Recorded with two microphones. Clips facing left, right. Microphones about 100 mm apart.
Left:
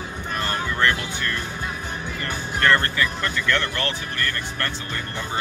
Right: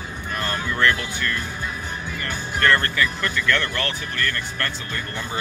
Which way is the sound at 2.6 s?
25° left (ahead or behind).